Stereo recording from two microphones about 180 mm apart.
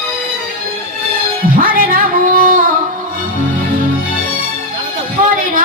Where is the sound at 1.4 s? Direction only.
50° right (ahead or behind).